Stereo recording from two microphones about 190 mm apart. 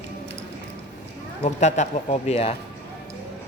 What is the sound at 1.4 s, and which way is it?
Speech, 35° left (ahead or behind).